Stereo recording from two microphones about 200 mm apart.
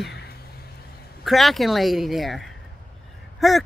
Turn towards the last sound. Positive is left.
turn(degrees=0)  # may be behind; listen again after turning